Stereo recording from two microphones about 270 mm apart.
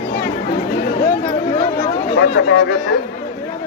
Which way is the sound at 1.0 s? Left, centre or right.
Left.